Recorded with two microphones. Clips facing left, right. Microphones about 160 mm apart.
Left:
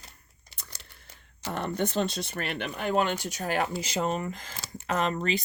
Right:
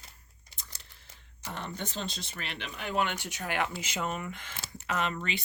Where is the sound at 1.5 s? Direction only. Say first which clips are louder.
Left 10 dB; 60° left (ahead or behind).